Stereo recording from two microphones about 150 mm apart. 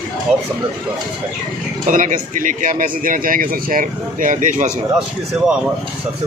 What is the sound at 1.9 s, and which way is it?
Speech, 60° right (ahead or behind).